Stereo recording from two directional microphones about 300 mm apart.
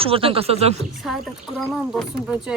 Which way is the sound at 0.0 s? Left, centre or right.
Centre.